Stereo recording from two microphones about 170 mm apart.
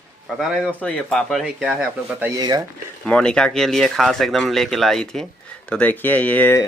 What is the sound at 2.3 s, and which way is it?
Speech, 20° right (ahead or behind).